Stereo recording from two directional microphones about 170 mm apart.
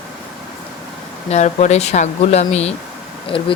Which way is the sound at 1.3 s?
40° left (ahead or behind).